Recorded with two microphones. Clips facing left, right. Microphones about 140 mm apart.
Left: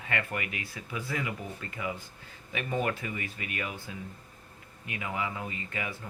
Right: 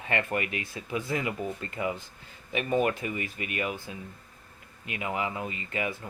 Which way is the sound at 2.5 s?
20° right (ahead or behind).